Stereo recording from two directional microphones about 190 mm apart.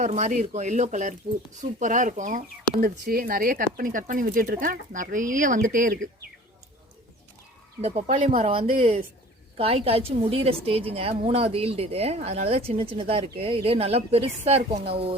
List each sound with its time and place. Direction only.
0.0 s a woman's voice: 40° right (ahead or behind)
2.8 s speech: 50° right (ahead or behind)
7.8 s a woman's voice: 35° right (ahead or behind)